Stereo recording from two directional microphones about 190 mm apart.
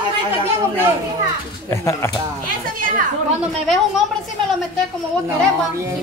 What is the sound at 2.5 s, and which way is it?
Speech, 45° right (ahead or behind).